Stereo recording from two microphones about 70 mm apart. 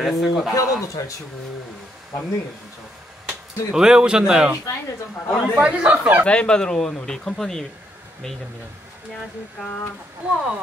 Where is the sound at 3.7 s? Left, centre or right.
Centre.